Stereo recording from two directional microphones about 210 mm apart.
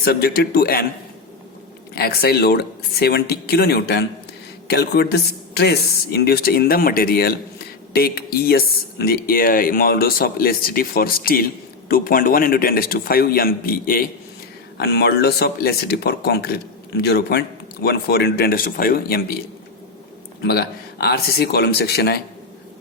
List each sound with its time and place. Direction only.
0.0 s speech: 50° left (ahead or behind)
2.0 s speech: 45° left (ahead or behind)
20.4 s speech: 50° left (ahead or behind)